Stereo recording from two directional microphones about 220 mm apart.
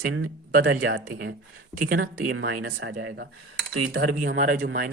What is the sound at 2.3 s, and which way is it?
Speech, 60° right (ahead or behind).